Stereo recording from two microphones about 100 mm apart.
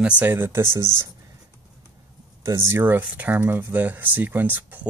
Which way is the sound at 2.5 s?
25° right (ahead or behind).